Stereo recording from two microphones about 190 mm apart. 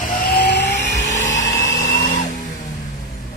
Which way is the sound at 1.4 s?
20° left (ahead or behind).